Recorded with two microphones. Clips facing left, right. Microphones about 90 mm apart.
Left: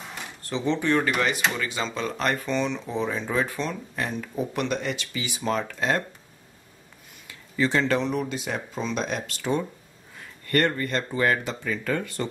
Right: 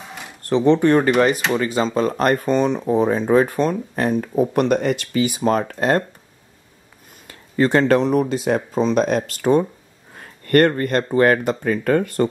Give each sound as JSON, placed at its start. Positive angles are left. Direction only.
{"t": 0.4, "sound": "speech", "side_deg": -60}
{"t": 7.2, "sound": "speech", "side_deg": -50}